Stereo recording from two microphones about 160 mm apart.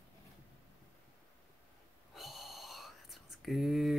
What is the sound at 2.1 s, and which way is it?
Whispering, centre (ahead or behind).